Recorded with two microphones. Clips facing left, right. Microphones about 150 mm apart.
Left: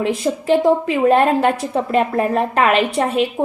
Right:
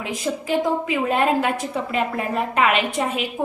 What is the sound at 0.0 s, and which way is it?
A woman's voice, 35° left (ahead or behind).